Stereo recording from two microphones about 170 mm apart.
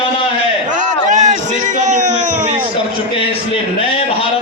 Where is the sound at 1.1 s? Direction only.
45° right (ahead or behind).